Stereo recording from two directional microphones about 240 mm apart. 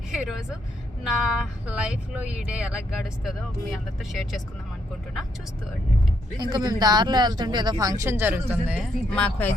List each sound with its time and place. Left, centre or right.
0.1 s vehicle: centre
1.0 s speech: centre
6.3 s speech: centre